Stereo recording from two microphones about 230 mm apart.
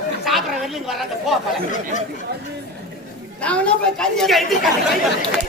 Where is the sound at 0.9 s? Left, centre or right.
Centre.